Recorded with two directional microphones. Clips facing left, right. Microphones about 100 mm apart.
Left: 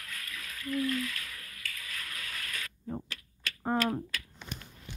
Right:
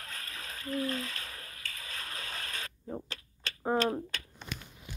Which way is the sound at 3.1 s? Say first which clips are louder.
Left 1 dB; 25° right (ahead or behind).